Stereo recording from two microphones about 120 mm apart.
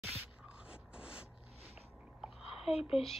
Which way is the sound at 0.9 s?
10° right (ahead or behind).